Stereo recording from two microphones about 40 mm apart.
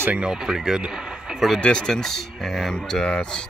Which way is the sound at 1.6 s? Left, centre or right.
Left.